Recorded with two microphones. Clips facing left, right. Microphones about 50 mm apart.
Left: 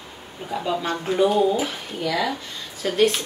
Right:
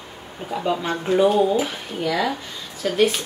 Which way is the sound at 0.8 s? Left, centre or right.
Centre.